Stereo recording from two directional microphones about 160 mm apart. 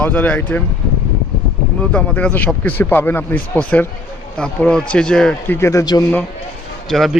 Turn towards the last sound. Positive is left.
turn(degrees=0)  # may be behind; listen again after turning